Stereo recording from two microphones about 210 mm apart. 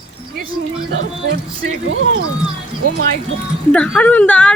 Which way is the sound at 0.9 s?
60° right (ahead or behind).